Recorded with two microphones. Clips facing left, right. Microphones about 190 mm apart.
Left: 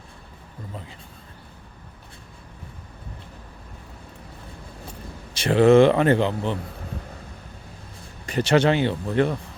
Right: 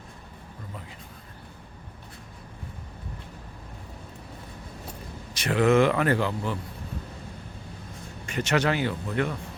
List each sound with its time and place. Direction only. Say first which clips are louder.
5.3 s speech: left 6 dB; 30° left (ahead or behind)
8.3 s speech: left 6 dB; 30° left (ahead or behind)